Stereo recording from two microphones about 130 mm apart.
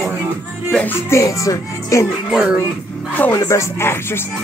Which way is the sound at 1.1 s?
25° left (ahead or behind).